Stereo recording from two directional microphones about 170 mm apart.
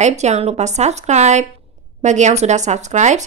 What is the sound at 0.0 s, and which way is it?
A woman's voice, 40° right (ahead or behind).